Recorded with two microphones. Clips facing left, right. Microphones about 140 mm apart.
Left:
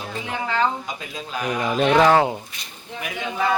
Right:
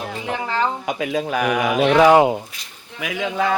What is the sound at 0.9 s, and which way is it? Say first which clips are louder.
Speech: right 10 dB; 70° right (ahead or behind).